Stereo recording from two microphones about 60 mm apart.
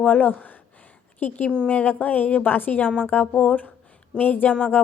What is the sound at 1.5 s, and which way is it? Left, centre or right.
A woman's voice, centre.